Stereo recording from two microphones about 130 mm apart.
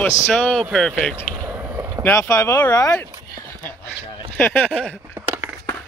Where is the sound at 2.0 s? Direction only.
20° left (ahead or behind).